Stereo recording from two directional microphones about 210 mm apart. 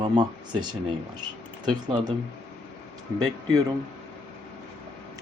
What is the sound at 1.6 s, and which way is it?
Speech, 20° right (ahead or behind).